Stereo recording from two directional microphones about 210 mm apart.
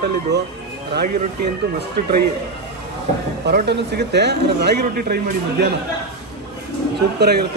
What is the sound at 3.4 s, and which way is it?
Speech, 50° right (ahead or behind).